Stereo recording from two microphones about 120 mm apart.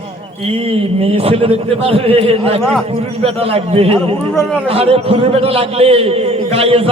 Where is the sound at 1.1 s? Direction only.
55° right (ahead or behind).